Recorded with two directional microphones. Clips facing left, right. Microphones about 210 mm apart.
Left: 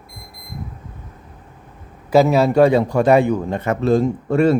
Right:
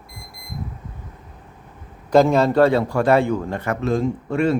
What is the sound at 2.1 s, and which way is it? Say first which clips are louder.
Speech: left 1 dB; 5° left (ahead or behind).